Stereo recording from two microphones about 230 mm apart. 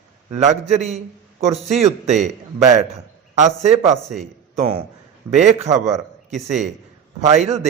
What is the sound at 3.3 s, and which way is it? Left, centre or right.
Speech, right.